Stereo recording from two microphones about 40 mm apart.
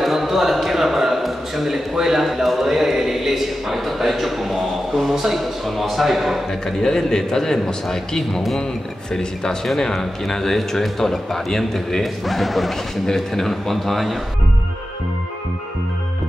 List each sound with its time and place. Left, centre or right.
0.0 s a sound: centre
2.0 s a man's voice: centre
6.8 s a man's voice: centre